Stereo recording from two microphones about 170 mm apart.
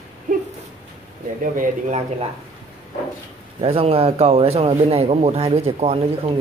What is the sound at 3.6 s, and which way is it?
Speech, 35° right (ahead or behind).